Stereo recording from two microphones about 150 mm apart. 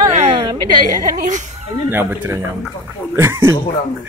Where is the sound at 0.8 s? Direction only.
60° right (ahead or behind).